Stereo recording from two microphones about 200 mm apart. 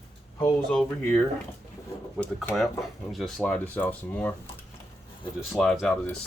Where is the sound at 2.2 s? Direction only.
5° left (ahead or behind).